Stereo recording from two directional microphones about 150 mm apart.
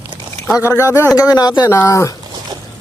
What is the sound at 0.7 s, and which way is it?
A man's voice, 15° left (ahead or behind).